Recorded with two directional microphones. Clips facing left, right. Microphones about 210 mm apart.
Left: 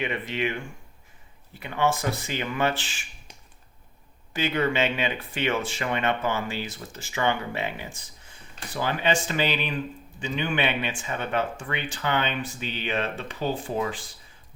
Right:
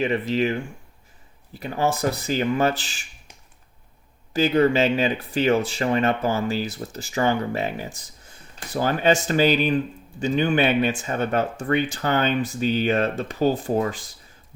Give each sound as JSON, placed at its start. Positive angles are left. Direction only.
{"t": 0.0, "sound": "speech", "side_deg": -35}
{"t": 4.4, "sound": "speech", "side_deg": -35}